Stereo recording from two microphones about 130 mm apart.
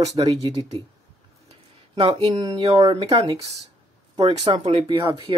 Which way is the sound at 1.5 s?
45° right (ahead or behind).